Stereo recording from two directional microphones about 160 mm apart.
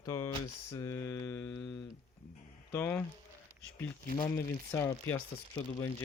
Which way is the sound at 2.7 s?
15° left (ahead or behind).